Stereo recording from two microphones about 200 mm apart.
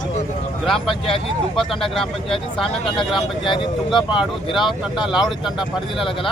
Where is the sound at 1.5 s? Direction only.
Centre (ahead or behind).